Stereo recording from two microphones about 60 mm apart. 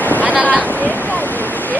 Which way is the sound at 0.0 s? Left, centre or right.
Left.